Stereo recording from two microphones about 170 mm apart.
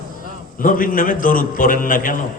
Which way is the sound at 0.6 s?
55° left (ahead or behind).